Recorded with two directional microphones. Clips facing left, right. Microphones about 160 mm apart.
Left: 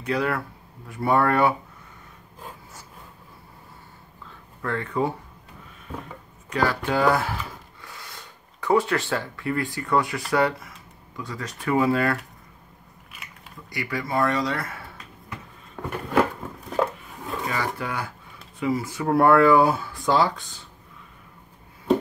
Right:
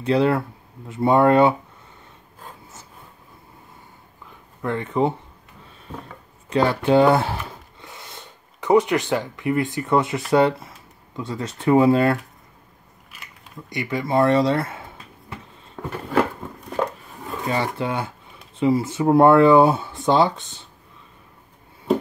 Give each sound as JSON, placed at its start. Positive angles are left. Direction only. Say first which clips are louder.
{"t": 0.0, "sound": "speech", "louder": "right 7 dB", "side_deg": -25}
{"t": 4.3, "sound": "a sound", "louder": "right 3 dB", "side_deg": -20}
{"t": 6.5, "sound": "speech", "louder": "right 6 dB", "side_deg": -25}
{"t": 13.1, "sound": "biting", "louder": "even", "side_deg": 0}
{"t": 13.7, "sound": "speech", "louder": "right 5 dB", "side_deg": -20}
{"t": 15.7, "sound": "a sound", "louder": "right 1 dB", "side_deg": 5}
{"t": 16.7, "sound": "chopping", "louder": "even", "side_deg": 0}
{"t": 17.5, "sound": "speech", "louder": "right 6 dB", "side_deg": -25}